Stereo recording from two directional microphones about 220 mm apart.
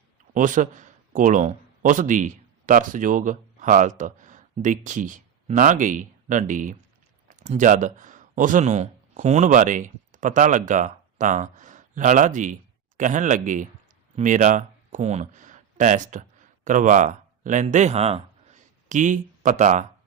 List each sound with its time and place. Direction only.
0.3 s speech: 35° right (ahead or behind)